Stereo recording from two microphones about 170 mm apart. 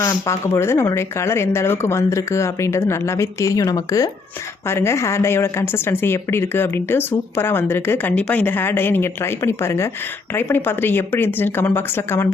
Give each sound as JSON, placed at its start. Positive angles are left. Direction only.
{"t": 0.0, "sound": "a woman's voice", "side_deg": 15}